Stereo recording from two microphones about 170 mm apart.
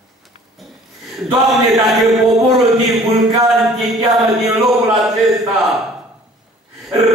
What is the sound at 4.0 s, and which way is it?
Music, 20° right (ahead or behind).